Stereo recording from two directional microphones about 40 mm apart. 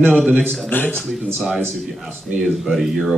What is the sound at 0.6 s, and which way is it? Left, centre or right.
Speech, left.